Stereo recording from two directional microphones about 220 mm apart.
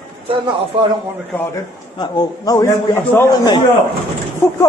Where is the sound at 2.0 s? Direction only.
15° left (ahead or behind).